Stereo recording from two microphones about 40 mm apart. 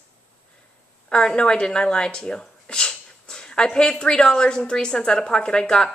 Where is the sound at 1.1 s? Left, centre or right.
Left.